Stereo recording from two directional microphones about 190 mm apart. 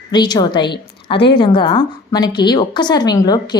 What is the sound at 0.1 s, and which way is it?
A woman's voice, 25° left (ahead or behind).